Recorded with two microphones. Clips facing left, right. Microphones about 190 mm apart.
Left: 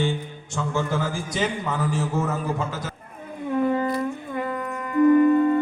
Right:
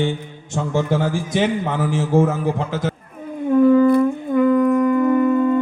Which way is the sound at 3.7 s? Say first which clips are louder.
Right 11 dB; 55° right (ahead or behind).